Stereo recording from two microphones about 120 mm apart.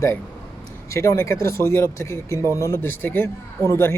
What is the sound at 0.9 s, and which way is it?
Speech, 25° left (ahead or behind).